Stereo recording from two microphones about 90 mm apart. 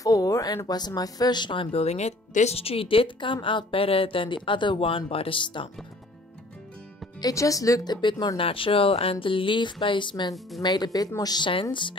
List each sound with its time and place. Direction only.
0.0 s speech: 40° left (ahead or behind); by 1.8 s 70° left (ahead or behind)
2.5 s speech: 90° left
4.5 s speech: 65° left (ahead or behind)
7.2 s speech: 40° left (ahead or behind)
7.9 s speech: 60° left (ahead or behind)
8.4 s speech: 80° left; by 10.3 s 60° left (ahead or behind)
10.6 s speech: 50° left (ahead or behind)